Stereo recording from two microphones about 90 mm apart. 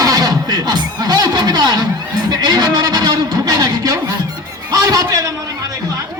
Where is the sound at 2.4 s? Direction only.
50° right (ahead or behind).